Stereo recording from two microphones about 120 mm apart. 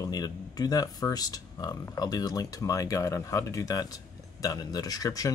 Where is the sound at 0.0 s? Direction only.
30° left (ahead or behind).